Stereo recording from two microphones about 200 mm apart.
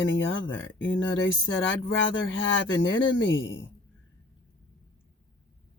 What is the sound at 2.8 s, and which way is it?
Speech, 70° left (ahead or behind).